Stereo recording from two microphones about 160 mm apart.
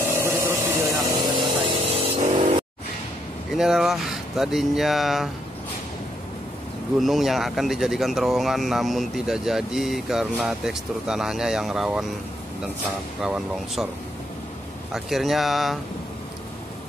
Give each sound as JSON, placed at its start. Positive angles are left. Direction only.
{"t": 0.0, "sound": "a sound", "side_deg": -15}
{"t": 1.7, "sound": "vehicle", "side_deg": -35}
{"t": 3.5, "sound": "speech", "side_deg": 0}
{"t": 7.0, "sound": "speech", "side_deg": 0}
{"t": 13.2, "sound": "speech", "side_deg": -5}
{"t": 14.9, "sound": "speech", "side_deg": 0}